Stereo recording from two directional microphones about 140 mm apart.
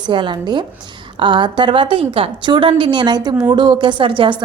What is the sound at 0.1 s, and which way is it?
A woman's voice, 35° right (ahead or behind).